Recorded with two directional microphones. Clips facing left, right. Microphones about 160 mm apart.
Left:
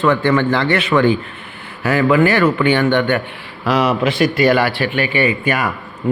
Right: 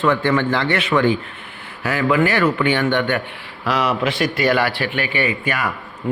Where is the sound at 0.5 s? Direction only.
35° left (ahead or behind).